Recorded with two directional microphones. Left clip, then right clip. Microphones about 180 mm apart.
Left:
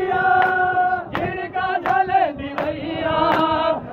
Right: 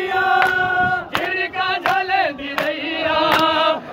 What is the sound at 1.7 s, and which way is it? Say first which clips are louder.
Chant: left 2 dB; 10° right (ahead or behind).